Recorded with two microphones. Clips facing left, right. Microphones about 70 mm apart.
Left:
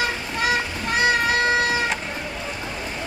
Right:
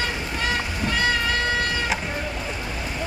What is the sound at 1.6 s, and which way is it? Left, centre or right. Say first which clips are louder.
Vehicle: left 3 dB; centre.